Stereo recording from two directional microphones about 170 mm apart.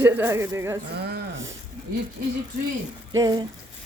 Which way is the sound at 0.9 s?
70° right (ahead or behind).